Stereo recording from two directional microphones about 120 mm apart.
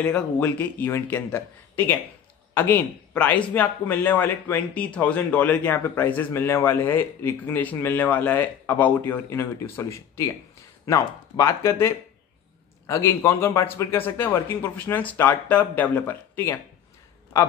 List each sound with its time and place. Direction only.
0.0 s a man's voice: 10° left (ahead or behind)